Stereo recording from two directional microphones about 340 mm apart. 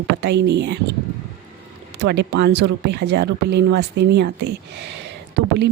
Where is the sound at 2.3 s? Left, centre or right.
Right.